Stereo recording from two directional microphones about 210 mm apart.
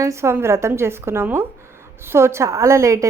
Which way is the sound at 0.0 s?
15° right (ahead or behind).